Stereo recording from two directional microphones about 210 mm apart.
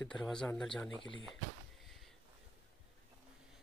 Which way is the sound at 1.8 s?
Centre (ahead or behind).